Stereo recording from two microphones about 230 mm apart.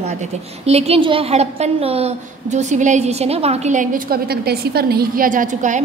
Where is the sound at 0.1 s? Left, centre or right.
Right.